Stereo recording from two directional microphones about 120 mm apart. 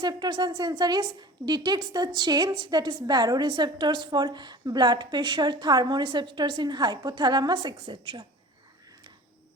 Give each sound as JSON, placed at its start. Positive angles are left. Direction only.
{"t": 0.0, "sound": "a woman's voice", "side_deg": -35}